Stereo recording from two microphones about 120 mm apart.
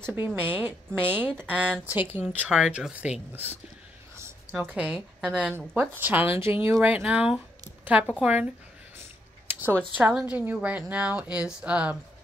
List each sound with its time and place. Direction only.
0.0 s a woman's voice: 20° right (ahead or behind)
4.5 s speech: 10° right (ahead or behind)
9.5 s a sound: 15° right (ahead or behind)
9.9 s a woman's voice: 5° right (ahead or behind)